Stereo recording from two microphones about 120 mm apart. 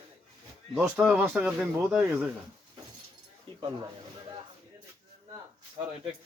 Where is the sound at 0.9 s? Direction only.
10° right (ahead or behind).